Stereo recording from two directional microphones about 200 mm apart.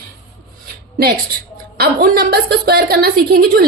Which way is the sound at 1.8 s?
50° right (ahead or behind).